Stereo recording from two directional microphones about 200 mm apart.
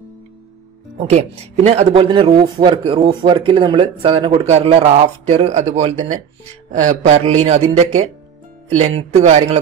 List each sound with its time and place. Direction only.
0.9 s speech: 30° right (ahead or behind)